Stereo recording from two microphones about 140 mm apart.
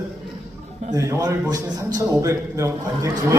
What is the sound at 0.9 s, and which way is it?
A man's voice, 25° right (ahead or behind).